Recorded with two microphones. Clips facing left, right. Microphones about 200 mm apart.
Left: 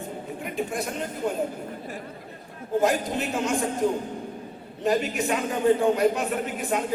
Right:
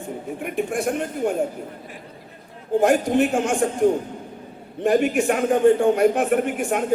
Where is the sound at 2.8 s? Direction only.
55° right (ahead or behind).